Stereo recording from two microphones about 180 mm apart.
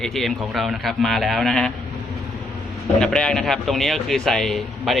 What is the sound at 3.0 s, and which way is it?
A man's voice, 5° left (ahead or behind).